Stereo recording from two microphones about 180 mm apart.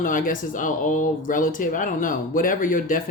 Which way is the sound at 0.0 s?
50° left (ahead or behind).